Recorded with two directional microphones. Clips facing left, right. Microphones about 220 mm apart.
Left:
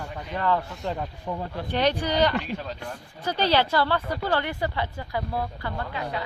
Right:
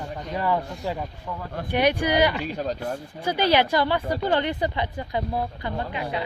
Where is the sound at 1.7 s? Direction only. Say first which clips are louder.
Right 3 dB; 10° right (ahead or behind).